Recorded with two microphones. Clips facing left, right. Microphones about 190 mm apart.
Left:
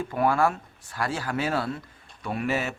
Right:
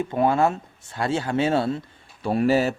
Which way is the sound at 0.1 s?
25° right (ahead or behind).